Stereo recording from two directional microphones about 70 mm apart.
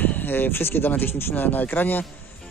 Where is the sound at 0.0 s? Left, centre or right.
Left.